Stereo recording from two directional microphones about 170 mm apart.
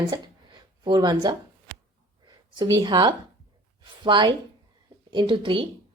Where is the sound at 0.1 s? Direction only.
25° right (ahead or behind).